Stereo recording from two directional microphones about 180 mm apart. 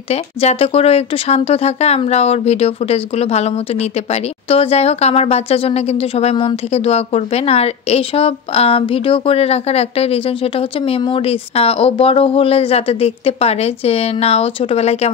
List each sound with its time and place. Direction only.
0.1 s speech: 35° left (ahead or behind)